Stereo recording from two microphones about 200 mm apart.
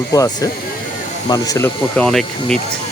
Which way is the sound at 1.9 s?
5° left (ahead or behind).